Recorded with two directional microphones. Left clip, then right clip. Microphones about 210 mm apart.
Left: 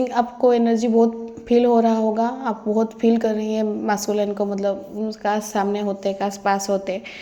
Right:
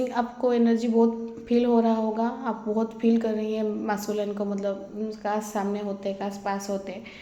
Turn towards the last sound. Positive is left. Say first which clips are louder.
# left 9 dB
turn(degrees=35)  # may be behind; listen again after turning